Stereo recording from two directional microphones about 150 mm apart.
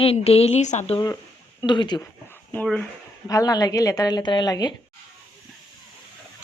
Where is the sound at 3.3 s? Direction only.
25° left (ahead or behind).